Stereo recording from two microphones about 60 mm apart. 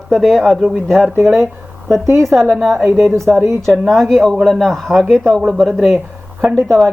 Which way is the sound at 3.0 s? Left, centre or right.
Right.